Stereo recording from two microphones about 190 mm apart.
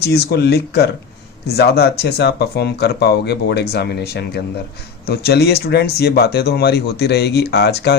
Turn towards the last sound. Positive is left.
turn(degrees=60)  # may be behind; listen again after turning